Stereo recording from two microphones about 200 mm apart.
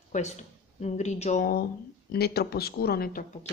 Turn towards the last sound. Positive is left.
turn(degrees=50)  # may be behind; listen again after turning